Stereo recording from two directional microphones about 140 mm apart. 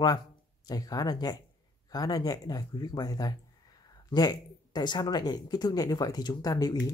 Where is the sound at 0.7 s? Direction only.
25° left (ahead or behind).